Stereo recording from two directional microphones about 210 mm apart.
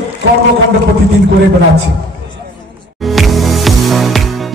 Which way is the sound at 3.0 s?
Centre (ahead or behind).